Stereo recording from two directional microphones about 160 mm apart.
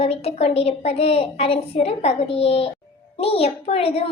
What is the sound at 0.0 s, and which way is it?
A child's voice, 40° left (ahead or behind).